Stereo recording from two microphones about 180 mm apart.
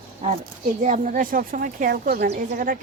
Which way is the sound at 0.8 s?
45° right (ahead or behind).